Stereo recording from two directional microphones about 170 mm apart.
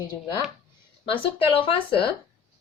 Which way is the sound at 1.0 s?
30° left (ahead or behind).